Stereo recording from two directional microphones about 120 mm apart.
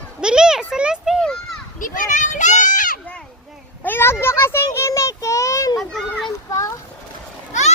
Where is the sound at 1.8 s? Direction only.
90° left.